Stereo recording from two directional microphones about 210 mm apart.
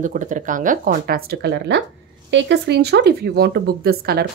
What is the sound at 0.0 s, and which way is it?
Speech, 40° right (ahead or behind).